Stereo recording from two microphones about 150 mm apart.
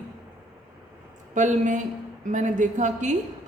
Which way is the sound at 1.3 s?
55° right (ahead or behind).